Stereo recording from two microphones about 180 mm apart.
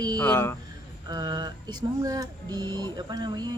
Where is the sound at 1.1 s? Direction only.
25° right (ahead or behind).